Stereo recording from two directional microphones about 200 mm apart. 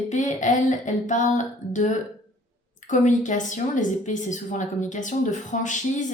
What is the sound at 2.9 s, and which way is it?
Speech, 40° left (ahead or behind).